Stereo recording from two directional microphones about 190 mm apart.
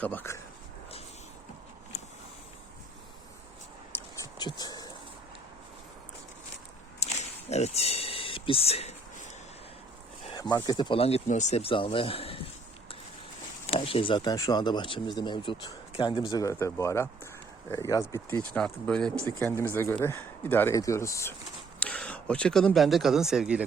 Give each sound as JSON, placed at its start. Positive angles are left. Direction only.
{"t": 0.0, "sound": "speech", "side_deg": 10}
{"t": 3.9, "sound": "a sound", "side_deg": 20}
{"t": 7.0, "sound": "a sound", "side_deg": 35}
{"t": 10.2, "sound": "speech", "side_deg": 20}
{"t": 13.7, "sound": "speech", "side_deg": 30}
{"t": 18.5, "sound": "speech", "side_deg": 5}